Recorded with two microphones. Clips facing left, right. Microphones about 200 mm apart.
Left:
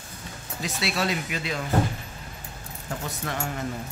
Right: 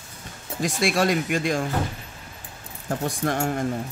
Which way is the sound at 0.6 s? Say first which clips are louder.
Right 6 dB; 50° right (ahead or behind).